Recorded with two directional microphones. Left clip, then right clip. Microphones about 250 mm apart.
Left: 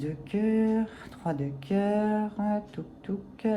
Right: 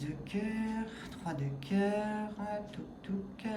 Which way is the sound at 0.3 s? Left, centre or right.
Centre.